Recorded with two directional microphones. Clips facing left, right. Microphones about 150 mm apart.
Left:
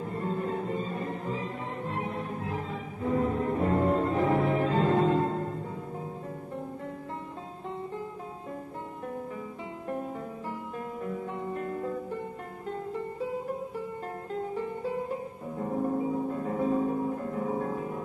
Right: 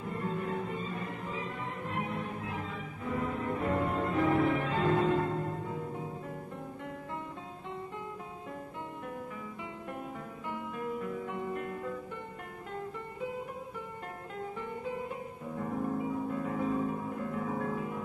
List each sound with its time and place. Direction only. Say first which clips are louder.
0.1 s music: left 3 dB; 35° left (ahead or behind)
10.8 s music: even; 35° left (ahead or behind)
15.6 s music: left 5 dB; 30° left (ahead or behind)